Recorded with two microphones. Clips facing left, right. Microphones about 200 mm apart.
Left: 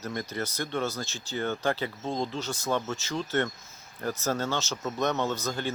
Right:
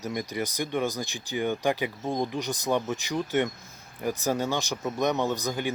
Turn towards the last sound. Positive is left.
turn(degrees=-15)  # may be behind; listen again after turning